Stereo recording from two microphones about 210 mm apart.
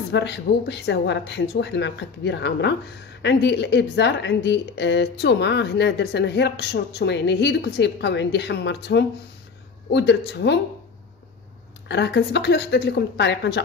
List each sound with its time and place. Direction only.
0.1 s speech: 55° left (ahead or behind)
11.9 s speech: 55° left (ahead or behind)